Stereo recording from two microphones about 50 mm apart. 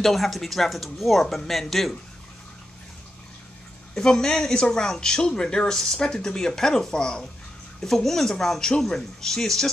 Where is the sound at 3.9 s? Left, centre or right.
Centre.